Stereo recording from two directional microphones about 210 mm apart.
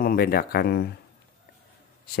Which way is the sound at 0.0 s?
45° left (ahead or behind).